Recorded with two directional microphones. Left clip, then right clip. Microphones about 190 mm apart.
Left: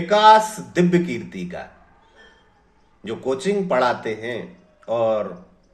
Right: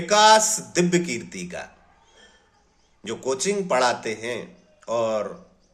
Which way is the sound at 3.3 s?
15° right (ahead or behind).